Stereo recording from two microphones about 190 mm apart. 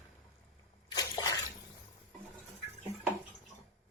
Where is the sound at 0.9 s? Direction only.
20° left (ahead or behind).